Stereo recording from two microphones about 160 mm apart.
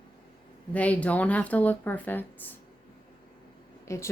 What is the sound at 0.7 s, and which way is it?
Speech, 10° left (ahead or behind).